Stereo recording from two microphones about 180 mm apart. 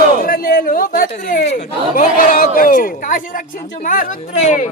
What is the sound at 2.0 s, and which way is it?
Speech, 50° left (ahead or behind).